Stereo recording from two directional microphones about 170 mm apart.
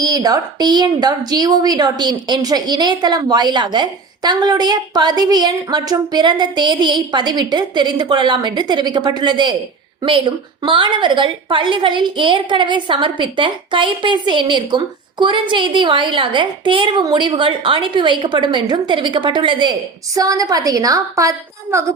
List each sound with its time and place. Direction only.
0.0 s a woman's voice: 20° right (ahead or behind)